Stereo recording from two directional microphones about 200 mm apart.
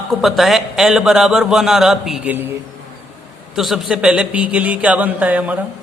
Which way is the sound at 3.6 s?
Centre (ahead or behind).